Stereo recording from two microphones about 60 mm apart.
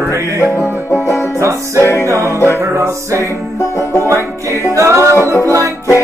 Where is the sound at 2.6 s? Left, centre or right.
Right.